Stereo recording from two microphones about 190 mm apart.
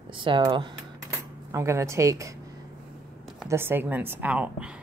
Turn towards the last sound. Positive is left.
turn(degrees=-5)  # may be behind; listen again after turning